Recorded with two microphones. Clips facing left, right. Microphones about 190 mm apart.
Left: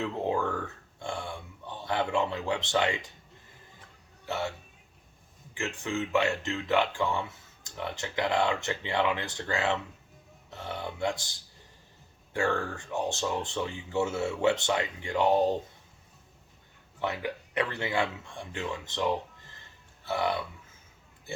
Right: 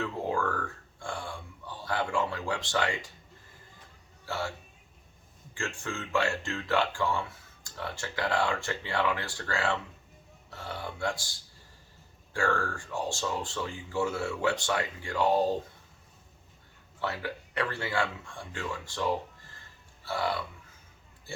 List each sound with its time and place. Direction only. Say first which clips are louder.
0.0 s a sound: left 1 dB; 20° left (ahead or behind)
4.3 s speech: left 2 dB; 20° left (ahead or behind)
5.5 s speech: left 4 dB; 20° left (ahead or behind)
17.0 s speech: left 2 dB; 20° left (ahead or behind)
20.1 s speech: left 2 dB; 20° left (ahead or behind)